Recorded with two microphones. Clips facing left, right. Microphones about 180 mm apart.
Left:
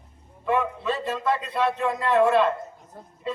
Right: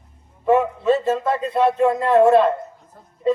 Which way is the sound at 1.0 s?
45° right (ahead or behind).